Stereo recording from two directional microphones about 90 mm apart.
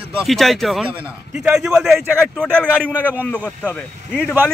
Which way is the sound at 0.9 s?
10° right (ahead or behind).